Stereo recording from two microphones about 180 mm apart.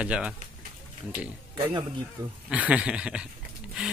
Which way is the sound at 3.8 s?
5° right (ahead or behind).